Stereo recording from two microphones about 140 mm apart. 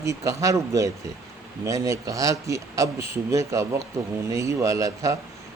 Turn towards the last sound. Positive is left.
turn(degrees=-25)  # may be behind; listen again after turning